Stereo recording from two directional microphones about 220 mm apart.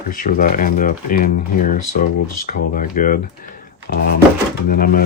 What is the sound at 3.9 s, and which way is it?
Drawer open or close, 45° left (ahead or behind).